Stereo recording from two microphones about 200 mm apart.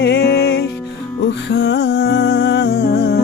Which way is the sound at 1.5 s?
60° left (ahead or behind).